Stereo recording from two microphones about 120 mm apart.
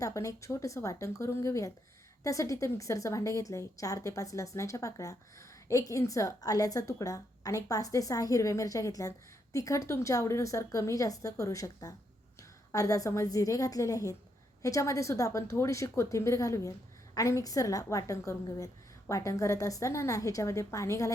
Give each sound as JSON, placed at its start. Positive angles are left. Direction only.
{"t": 0.0, "sound": "a woman's voice", "side_deg": 25}